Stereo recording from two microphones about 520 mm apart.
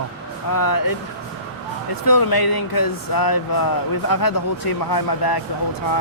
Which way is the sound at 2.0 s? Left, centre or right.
Left.